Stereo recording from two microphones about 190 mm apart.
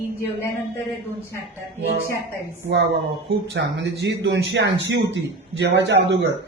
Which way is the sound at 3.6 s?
65° right (ahead or behind).